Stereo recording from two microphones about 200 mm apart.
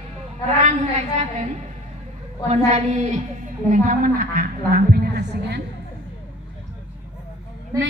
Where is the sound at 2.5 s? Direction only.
35° right (ahead or behind); by 5.6 s 50° right (ahead or behind).